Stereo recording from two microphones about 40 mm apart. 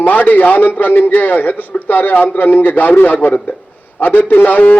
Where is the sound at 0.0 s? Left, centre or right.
Left.